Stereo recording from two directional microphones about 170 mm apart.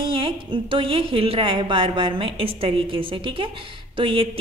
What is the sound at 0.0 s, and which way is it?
A woman's voice, 30° right (ahead or behind).